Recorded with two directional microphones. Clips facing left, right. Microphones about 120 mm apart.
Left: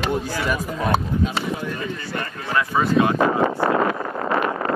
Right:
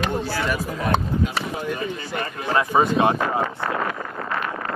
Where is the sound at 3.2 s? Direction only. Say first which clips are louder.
Left 5 dB; 30° left (ahead or behind).